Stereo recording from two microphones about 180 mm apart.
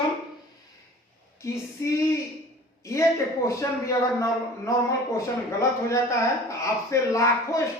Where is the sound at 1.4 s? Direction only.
15° left (ahead or behind).